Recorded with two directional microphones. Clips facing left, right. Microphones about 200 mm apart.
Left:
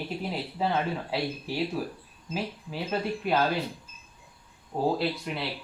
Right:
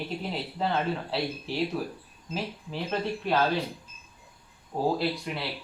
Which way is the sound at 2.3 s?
10° left (ahead or behind).